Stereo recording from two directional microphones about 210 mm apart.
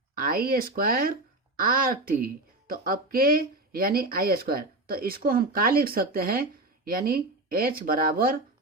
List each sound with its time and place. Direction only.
0.1 s speech: 45° right (ahead or behind)